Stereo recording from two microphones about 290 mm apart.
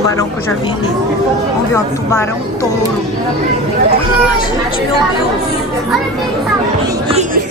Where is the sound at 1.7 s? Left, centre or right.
Centre.